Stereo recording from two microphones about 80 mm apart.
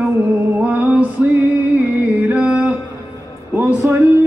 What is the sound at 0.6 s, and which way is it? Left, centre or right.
Music, centre.